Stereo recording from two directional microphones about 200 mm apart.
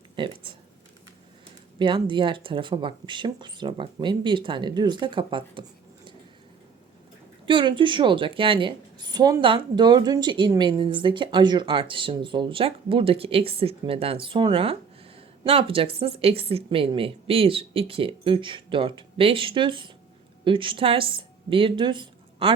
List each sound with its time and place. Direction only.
1.8 s a woman's voice: 25° right (ahead or behind)
7.4 s a woman's voice: 25° right (ahead or behind)